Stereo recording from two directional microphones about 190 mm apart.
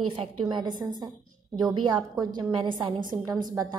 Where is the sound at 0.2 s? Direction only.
25° right (ahead or behind).